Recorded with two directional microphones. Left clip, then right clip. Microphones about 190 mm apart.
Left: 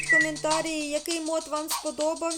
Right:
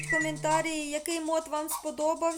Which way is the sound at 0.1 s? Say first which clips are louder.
Left 4 dB; centre (ahead or behind).